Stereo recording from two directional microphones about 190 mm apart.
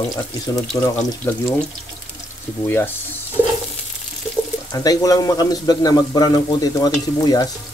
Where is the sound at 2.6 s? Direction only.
10° left (ahead or behind).